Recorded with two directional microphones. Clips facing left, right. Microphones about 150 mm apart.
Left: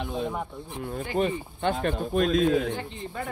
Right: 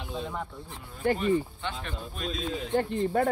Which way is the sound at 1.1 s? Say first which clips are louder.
Right 2 dB; 50° right (ahead or behind).